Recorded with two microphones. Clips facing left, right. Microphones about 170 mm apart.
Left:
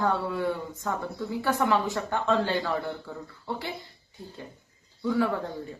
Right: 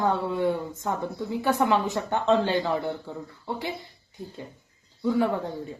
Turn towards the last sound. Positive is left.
turn(degrees=-20)  # may be behind; listen again after turning